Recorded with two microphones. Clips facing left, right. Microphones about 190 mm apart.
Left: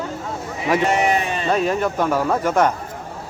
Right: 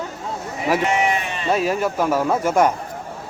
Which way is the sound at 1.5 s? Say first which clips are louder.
Even; 5° right (ahead or behind).